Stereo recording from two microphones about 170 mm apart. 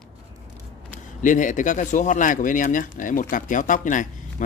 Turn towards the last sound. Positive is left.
turn(degrees=50)  # may be behind; listen again after turning